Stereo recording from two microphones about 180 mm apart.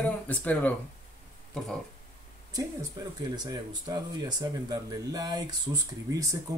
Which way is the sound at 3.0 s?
25° right (ahead or behind).